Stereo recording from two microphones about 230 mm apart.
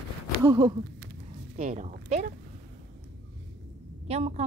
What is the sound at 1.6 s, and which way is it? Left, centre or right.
Speech, right.